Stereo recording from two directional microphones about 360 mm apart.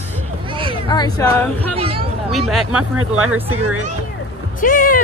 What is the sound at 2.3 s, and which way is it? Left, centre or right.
Speech, centre.